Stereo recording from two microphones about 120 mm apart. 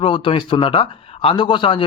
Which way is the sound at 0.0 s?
45° left (ahead or behind).